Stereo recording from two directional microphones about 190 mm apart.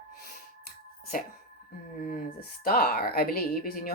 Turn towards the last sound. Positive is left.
turn(degrees=50)  # may be behind; listen again after turning